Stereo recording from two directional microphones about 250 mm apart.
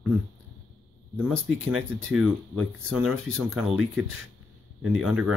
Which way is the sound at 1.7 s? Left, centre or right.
Centre.